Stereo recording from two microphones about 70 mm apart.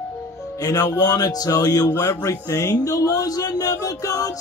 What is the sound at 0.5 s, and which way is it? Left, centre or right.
Speech, left.